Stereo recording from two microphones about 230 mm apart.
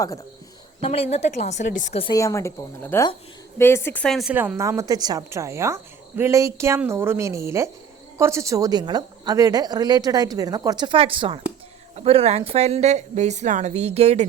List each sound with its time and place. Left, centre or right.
0.8 s a woman's voice: left; by 14.3 s right